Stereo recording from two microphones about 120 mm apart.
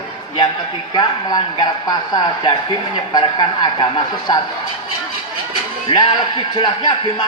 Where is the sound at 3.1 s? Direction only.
35° left (ahead or behind).